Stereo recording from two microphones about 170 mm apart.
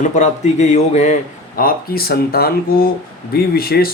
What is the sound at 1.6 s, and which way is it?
Speech, 60° left (ahead or behind).